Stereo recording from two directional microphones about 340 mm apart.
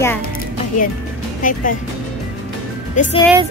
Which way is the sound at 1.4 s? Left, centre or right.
Left.